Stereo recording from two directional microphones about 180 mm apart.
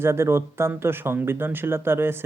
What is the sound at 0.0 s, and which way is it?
Speech, 15° right (ahead or behind).